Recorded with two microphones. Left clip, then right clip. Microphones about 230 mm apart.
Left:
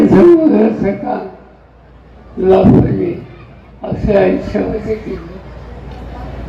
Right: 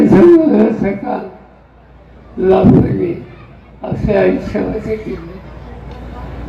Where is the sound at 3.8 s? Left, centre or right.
Right.